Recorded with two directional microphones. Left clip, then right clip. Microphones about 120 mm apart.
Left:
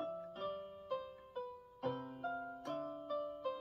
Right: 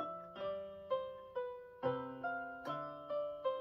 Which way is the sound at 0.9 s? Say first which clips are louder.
Right 4 dB; 45° right (ahead or behind).